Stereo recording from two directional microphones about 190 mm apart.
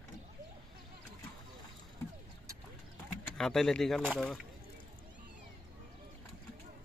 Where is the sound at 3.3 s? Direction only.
Centre (ahead or behind).